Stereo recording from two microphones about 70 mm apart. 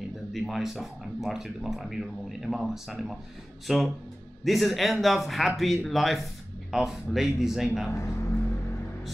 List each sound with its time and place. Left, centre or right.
0.3 s speech: centre
7.9 s music: left